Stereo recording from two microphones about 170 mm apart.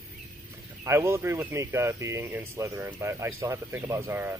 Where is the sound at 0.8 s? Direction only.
15° right (ahead or behind).